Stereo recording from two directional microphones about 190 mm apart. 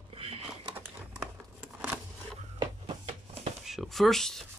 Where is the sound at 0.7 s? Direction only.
10° right (ahead or behind).